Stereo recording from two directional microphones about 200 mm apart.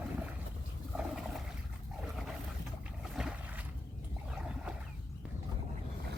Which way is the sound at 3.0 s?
5° right (ahead or behind).